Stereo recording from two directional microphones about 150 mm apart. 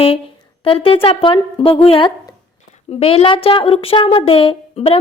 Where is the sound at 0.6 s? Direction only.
35° left (ahead or behind).